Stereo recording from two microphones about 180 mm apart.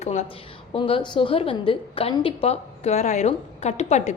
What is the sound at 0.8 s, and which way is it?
A woman's voice, 30° left (ahead or behind).